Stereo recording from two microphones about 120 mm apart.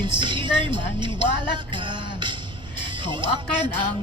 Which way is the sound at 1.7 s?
40° right (ahead or behind).